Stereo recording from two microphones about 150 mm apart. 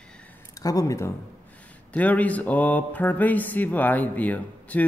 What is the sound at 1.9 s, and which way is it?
Speech, 10° left (ahead or behind).